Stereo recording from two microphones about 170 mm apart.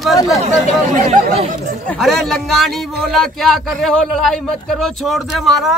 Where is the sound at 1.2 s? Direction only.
55° right (ahead or behind).